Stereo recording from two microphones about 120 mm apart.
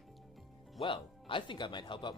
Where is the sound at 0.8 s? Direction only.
45° left (ahead or behind).